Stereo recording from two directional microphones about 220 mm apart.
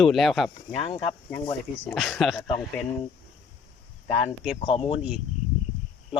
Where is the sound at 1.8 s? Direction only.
Centre (ahead or behind).